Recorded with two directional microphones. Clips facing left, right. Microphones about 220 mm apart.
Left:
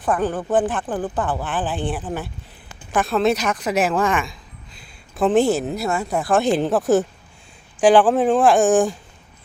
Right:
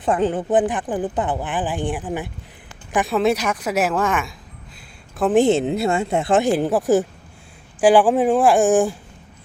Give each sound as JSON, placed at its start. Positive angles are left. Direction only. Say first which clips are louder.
{"t": 0.0, "sound": "speech", "louder": "right 2 dB", "side_deg": -20}
{"t": 5.3, "sound": "speech", "louder": "right 3 dB", "side_deg": -20}
{"t": 6.4, "sound": "speech", "louder": "even", "side_deg": -10}